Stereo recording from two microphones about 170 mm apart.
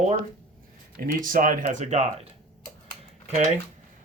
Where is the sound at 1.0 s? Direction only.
55° right (ahead or behind).